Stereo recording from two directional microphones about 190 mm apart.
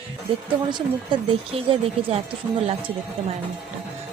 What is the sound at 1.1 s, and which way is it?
Speech, 25° right (ahead or behind).